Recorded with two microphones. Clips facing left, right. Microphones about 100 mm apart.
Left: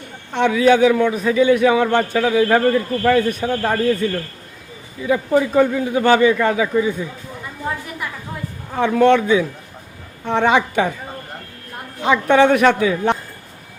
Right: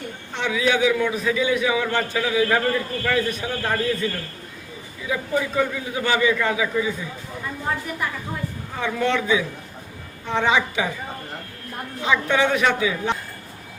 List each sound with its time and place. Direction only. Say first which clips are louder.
0.3 s a man's voice: left 8 dB; 50° left (ahead or behind)
1.5 s a man's voice: left 7 dB; 50° left (ahead or behind)
5.0 s a man's voice: left 7 dB; 40° left (ahead or behind)
8.7 s a man's voice: left 9 dB; 50° left (ahead or behind)
12.0 s a man's voice: left 7 dB; 45° left (ahead or behind)